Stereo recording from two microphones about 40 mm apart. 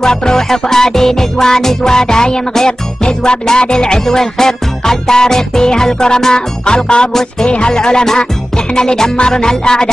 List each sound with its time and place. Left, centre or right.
0.0 s music: centre